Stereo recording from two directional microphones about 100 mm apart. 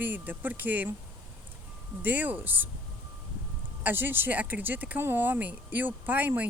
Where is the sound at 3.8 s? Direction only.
20° right (ahead or behind).